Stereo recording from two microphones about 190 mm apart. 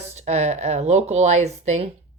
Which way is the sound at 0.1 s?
35° right (ahead or behind).